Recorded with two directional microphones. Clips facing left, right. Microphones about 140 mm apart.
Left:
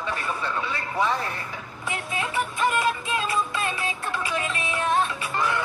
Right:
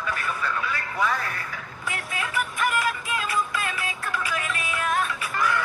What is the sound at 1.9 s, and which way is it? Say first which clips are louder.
Music: left 2 dB; 25° left (ahead or behind).